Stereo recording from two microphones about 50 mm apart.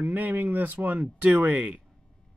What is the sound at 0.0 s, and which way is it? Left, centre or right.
Speech, right.